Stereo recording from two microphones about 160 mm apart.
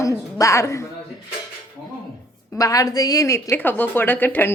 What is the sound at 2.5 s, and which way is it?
A woman's voice, 20° left (ahead or behind).